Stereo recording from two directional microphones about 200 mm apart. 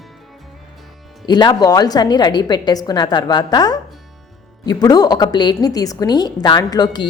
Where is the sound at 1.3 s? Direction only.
20° left (ahead or behind).